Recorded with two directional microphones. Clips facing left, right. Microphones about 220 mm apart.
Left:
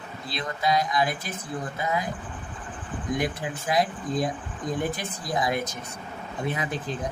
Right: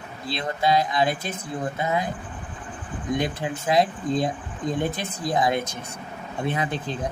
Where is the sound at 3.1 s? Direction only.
25° right (ahead or behind).